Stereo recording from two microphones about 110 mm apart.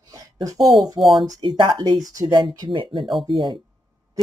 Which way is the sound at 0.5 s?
Centre (ahead or behind).